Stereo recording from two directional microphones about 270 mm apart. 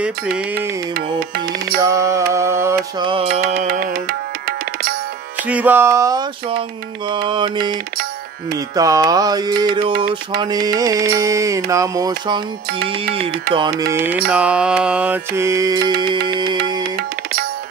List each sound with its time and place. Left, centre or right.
1.8 s music: centre
3.3 s music: right
5.5 s music: centre
8.7 s music: centre
9.9 s music: right
10.4 s music: centre
14.3 s music: centre